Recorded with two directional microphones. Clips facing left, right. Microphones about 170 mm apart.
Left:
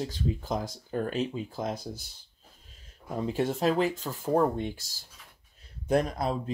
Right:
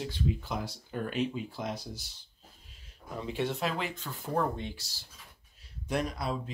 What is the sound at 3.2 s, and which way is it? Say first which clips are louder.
Speech: left 4 dB; 40° left (ahead or behind).